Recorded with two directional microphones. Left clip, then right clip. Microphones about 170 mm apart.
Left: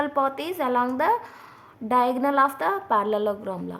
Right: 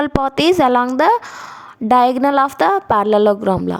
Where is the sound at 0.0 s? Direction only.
50° right (ahead or behind).